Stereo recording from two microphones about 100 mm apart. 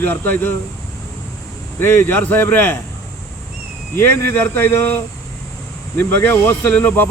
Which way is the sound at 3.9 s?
25° left (ahead or behind).